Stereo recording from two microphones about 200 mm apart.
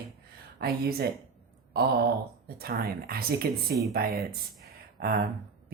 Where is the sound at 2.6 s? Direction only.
50° right (ahead or behind).